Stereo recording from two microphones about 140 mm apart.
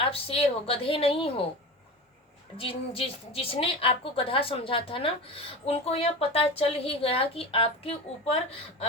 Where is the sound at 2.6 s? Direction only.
40° left (ahead or behind).